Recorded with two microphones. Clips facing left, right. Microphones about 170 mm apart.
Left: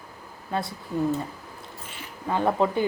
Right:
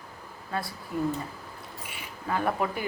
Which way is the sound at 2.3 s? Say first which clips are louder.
Left 5 dB; 25° left (ahead or behind).